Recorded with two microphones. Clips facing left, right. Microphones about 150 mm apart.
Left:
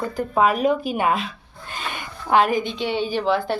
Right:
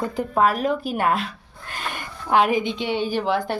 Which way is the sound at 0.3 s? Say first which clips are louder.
Left 2 dB; centre (ahead or behind).